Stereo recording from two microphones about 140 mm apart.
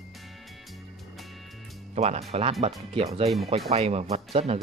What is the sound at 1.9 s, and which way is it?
Speech, 50° right (ahead or behind).